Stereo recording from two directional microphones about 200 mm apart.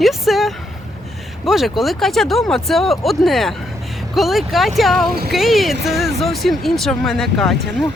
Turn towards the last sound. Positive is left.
turn(degrees=0)  # may be behind; listen again after turning